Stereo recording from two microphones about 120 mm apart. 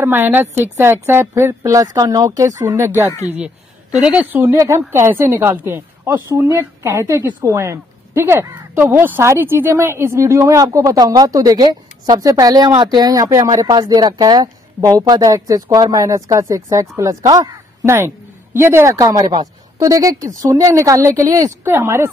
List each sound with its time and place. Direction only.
0.0 s a woman's voice: 15° right (ahead or behind)
3.3 s a woman's voice: 10° right (ahead or behind)